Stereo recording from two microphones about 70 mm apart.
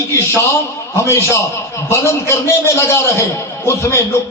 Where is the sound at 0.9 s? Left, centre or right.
Left.